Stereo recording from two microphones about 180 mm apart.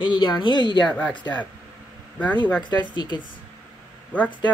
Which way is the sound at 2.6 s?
25° left (ahead or behind).